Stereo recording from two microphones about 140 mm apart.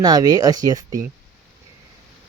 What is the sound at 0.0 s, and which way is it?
Speech, 25° right (ahead or behind).